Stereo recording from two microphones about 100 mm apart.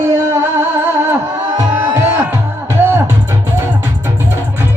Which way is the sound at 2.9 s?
20° right (ahead or behind).